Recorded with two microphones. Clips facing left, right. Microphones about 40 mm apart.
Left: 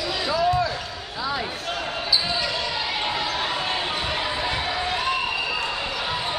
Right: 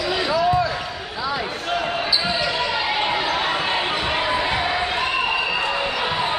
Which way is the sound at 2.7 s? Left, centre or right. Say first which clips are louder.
Right 5 dB; right.